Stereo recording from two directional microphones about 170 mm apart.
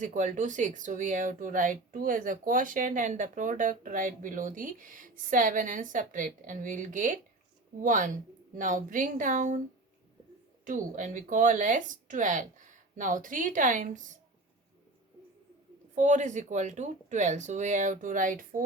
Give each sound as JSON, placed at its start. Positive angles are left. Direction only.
{"t": 0.0, "sound": "speech", "side_deg": -45}
{"t": 10.7, "sound": "speech", "side_deg": -50}
{"t": 16.0, "sound": "speech", "side_deg": -45}